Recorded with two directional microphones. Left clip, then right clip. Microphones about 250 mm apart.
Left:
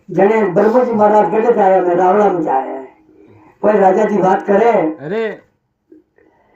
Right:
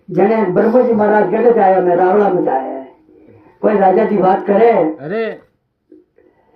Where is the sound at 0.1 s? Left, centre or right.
Right.